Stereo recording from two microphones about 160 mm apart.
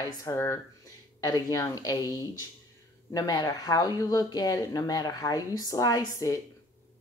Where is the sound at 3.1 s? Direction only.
25° left (ahead or behind).